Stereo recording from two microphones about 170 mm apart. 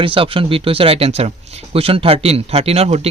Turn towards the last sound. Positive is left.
turn(degrees=-35)  # may be behind; listen again after turning